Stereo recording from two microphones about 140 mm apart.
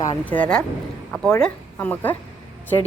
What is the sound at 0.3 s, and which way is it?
A woman's voice, 10° left (ahead or behind).